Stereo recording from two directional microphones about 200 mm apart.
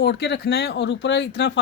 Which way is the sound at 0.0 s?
55° left (ahead or behind).